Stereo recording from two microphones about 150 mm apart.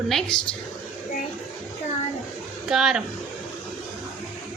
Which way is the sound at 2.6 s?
Centre (ahead or behind).